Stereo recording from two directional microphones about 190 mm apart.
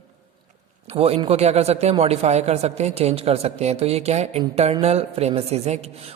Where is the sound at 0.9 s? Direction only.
30° right (ahead or behind).